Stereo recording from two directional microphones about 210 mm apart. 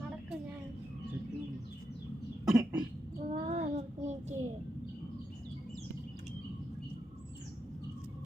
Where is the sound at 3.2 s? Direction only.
30° right (ahead or behind).